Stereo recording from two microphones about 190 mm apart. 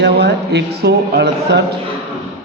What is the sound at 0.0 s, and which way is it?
Speech, 60° right (ahead or behind).